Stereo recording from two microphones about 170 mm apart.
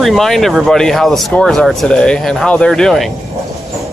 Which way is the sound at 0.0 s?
Centre (ahead or behind).